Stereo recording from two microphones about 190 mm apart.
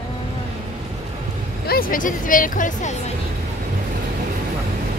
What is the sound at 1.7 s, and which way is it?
Speech, 45° left (ahead or behind).